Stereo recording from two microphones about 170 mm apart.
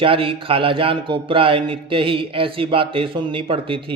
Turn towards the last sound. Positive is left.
turn(degrees=-30)  # may be behind; listen again after turning